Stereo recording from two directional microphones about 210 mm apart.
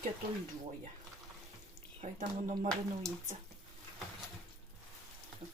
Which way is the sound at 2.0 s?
35° right (ahead or behind).